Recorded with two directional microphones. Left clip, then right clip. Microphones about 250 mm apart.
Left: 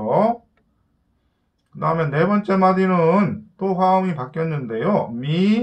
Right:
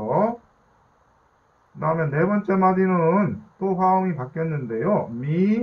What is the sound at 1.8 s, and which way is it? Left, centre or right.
Speech, centre.